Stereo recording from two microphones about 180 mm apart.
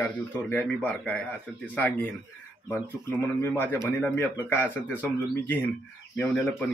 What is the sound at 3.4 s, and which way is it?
A man's voice, 10° left (ahead or behind).